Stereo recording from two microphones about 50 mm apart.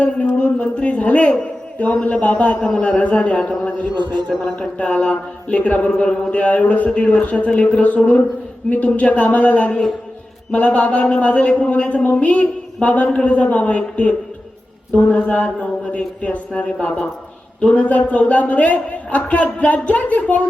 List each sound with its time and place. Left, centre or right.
0.0 s a man's voice: left
2.6 s a man's voice: centre
4.8 s a man's voice: left